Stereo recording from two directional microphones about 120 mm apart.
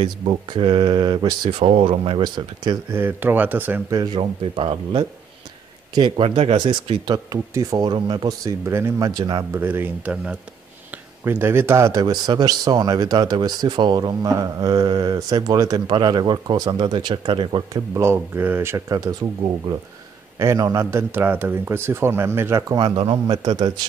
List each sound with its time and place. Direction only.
0.0 s speech: 45° right (ahead or behind)
2.9 s speech: 15° right (ahead or behind)
3.9 s speech: 40° right (ahead or behind)
9.5 s speech: 15° right (ahead or behind); by 17.8 s 40° right (ahead or behind)
17.9 s a man's voice: 20° right (ahead or behind)
18.9 s speech: 30° right (ahead or behind)
20.3 s a man's voice: 25° right (ahead or behind)
22.8 s speech: 45° right (ahead or behind)